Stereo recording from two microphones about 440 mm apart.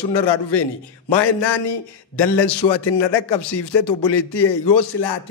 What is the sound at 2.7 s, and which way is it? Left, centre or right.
A man's voice, left.